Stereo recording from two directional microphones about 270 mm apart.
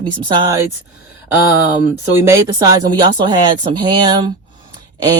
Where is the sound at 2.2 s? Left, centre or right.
Centre.